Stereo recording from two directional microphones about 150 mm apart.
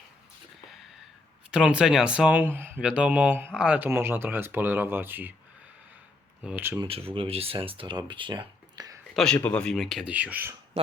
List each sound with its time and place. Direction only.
1.5 s speech: 5° right (ahead or behind)
6.4 s speech: 10° right (ahead or behind)
6.8 s speech: 40° right (ahead or behind)
9.1 s speech: 5° left (ahead or behind); by 10.5 s 10° right (ahead or behind)